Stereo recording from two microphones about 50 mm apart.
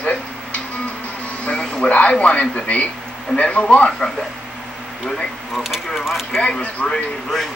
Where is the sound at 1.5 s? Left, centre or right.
Centre.